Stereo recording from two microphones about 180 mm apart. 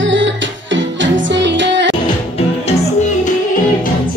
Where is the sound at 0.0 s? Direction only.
90° right.